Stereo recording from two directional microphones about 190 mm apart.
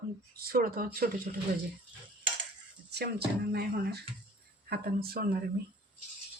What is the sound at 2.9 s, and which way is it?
Speech, 55° right (ahead or behind).